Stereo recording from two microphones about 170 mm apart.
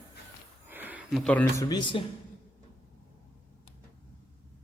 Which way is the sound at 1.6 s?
25° left (ahead or behind).